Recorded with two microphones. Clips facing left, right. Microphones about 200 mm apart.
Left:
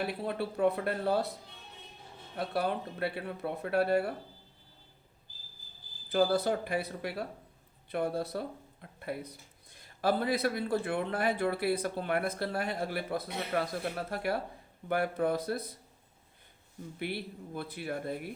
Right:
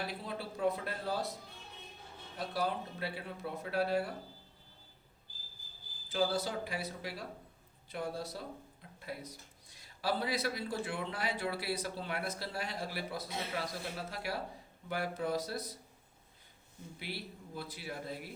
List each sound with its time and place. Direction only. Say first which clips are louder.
0.1 s speech: left 7 dB; 60° left (ahead or behind)
2.4 s speech: left 4 dB; 60° left (ahead or behind)
6.1 s speech: left 6 dB; 55° left (ahead or behind)
17.0 s speech: left 8 dB; 55° left (ahead or behind)